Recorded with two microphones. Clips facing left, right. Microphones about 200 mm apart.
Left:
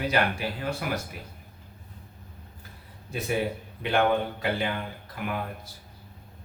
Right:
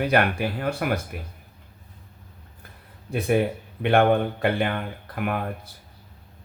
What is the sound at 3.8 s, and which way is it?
Speech, 55° right (ahead or behind).